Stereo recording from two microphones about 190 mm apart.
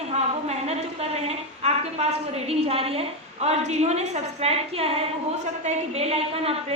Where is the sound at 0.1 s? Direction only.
35° right (ahead or behind).